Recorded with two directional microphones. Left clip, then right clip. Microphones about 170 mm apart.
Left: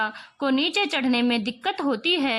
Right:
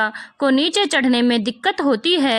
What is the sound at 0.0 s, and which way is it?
Speech, 25° right (ahead or behind).